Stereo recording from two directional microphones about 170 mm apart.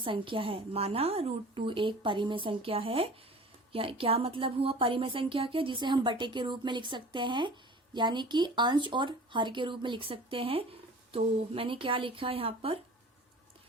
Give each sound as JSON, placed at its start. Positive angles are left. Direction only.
{"t": 0.0, "sound": "a woman's voice", "side_deg": -30}